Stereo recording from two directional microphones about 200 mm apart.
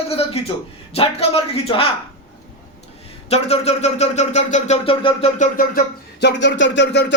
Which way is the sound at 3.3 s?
30° left (ahead or behind).